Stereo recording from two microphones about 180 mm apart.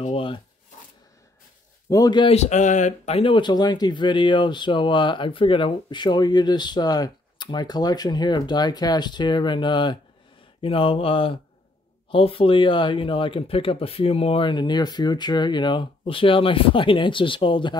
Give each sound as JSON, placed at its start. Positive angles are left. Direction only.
{"t": 0.0, "sound": "speech", "side_deg": 30}
{"t": 1.9, "sound": "speech", "side_deg": 20}